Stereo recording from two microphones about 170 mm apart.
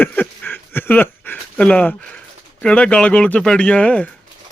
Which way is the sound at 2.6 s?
5° left (ahead or behind).